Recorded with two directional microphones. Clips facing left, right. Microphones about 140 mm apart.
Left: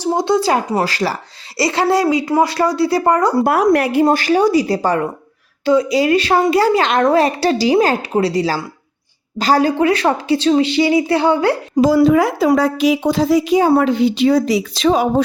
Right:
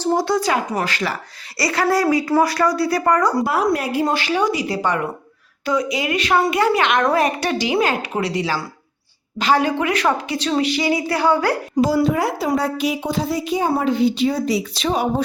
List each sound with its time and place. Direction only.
0.0 s a woman's voice: 20° left (ahead or behind)
3.4 s a woman's voice: 60° left (ahead or behind)
4.0 s a woman's voice: 45° left (ahead or behind); by 11.5 s 25° left (ahead or behind)
11.9 s a woman's voice: 90° left